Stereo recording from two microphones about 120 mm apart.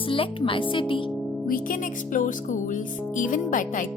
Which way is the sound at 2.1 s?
90° left.